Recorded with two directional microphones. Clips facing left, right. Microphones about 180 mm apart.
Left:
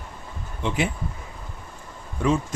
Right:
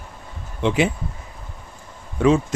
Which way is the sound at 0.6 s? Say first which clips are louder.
Right 6 dB; 90° right.